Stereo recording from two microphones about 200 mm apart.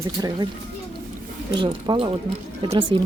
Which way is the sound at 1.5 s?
25° right (ahead or behind).